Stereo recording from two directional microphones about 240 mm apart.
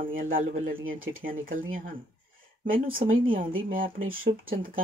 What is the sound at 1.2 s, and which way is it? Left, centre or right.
Speech, right.